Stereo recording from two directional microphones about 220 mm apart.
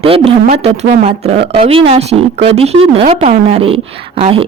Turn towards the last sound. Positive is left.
turn(degrees=-25)  # may be behind; listen again after turning